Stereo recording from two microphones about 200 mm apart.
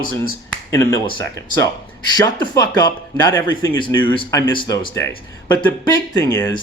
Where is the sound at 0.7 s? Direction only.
15° left (ahead or behind).